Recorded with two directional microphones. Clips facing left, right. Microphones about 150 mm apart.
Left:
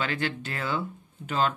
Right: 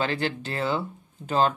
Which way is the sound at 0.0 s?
30° right (ahead or behind).